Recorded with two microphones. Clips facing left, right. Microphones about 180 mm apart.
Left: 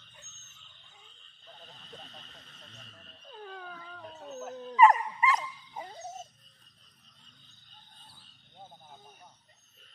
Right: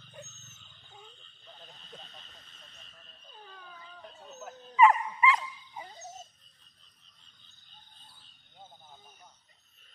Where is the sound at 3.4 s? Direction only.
60° left (ahead or behind).